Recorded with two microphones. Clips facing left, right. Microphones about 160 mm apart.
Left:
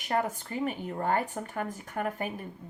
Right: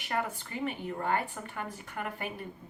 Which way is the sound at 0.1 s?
40° left (ahead or behind).